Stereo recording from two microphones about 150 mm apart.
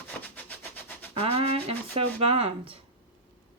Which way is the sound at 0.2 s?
10° left (ahead or behind).